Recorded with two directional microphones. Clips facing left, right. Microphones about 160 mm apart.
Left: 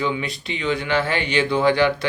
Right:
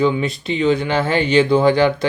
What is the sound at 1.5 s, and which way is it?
Speech, 45° right (ahead or behind).